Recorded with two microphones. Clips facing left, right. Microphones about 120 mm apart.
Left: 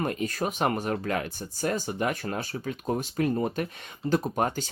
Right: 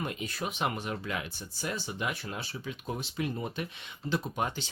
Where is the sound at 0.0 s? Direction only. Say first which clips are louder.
Left 7 dB; 45° left (ahead or behind).